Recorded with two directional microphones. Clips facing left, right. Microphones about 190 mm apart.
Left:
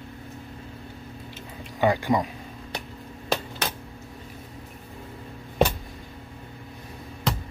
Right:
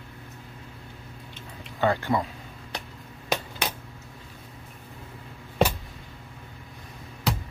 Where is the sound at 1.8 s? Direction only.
15° left (ahead or behind).